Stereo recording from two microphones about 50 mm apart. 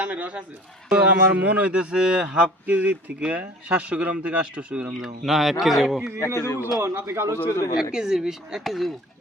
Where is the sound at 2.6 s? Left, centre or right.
Right.